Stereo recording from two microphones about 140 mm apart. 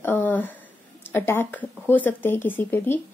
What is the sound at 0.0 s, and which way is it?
Speech, 15° left (ahead or behind).